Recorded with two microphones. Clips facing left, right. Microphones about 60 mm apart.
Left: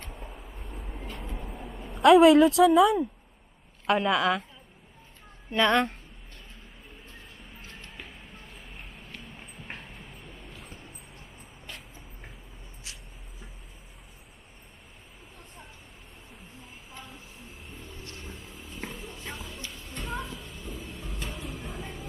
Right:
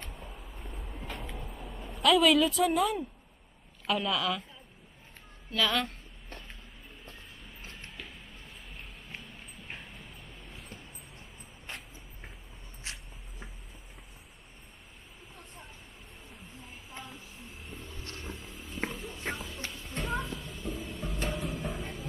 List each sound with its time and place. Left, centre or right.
0.2 s vehicle: centre
1.5 s a sound: centre
2.0 s speech: left
3.8 s speech: centre
4.2 s speech: centre
10.5 s vehicle: centre
12.9 s a sound: right
16.6 s a sound: centre
18.9 s music: centre
20.0 s cat: centre
21.3 s music: centre